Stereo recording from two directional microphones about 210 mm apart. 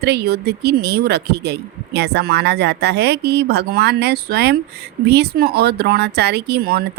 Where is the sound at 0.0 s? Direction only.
50° right (ahead or behind).